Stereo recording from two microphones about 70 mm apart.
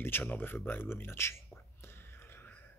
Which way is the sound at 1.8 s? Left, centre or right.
Left.